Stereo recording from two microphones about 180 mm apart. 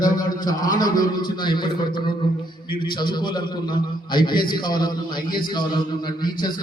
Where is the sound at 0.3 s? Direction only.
20° left (ahead or behind).